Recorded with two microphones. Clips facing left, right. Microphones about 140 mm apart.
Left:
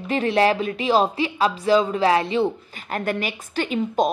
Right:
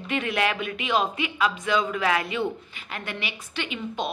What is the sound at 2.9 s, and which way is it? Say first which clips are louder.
A woman's voice: left 9 dB; 45° left (ahead or behind).